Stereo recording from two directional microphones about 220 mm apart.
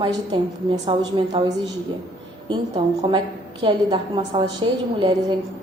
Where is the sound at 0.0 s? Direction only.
20° right (ahead or behind).